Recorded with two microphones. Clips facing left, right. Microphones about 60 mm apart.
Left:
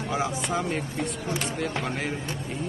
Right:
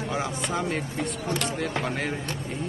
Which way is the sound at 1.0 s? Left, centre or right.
Right.